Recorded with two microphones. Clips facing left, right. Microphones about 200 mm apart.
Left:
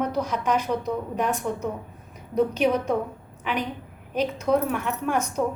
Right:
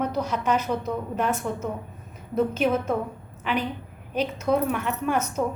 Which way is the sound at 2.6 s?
5° right (ahead or behind).